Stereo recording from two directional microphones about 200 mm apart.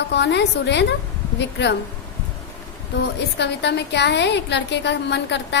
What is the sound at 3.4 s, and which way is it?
A woman's voice, 60° left (ahead or behind).